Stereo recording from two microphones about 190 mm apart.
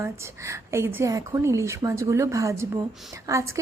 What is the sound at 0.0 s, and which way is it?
Speech, 15° right (ahead or behind).